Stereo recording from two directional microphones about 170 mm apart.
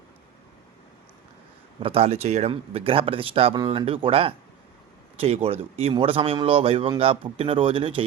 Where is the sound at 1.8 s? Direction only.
35° right (ahead or behind).